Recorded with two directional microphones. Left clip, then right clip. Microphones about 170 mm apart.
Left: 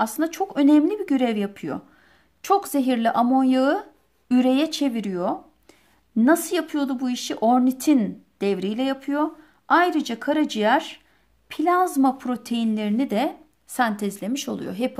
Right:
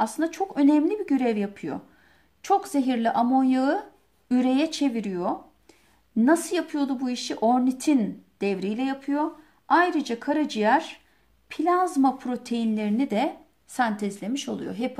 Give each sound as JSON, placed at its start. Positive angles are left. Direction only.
{"t": 0.0, "sound": "speech", "side_deg": 35}